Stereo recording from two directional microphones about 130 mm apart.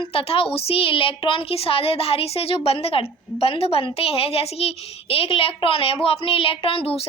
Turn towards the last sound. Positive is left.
turn(degrees=45)  # may be behind; listen again after turning